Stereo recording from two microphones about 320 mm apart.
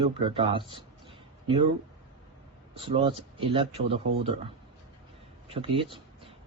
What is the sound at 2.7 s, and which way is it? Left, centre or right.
Speech, centre.